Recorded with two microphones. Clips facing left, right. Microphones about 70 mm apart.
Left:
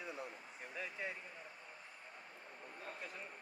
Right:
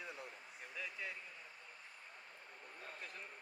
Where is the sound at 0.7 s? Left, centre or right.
Left.